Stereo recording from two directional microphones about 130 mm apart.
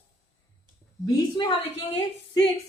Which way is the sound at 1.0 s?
35° left (ahead or behind).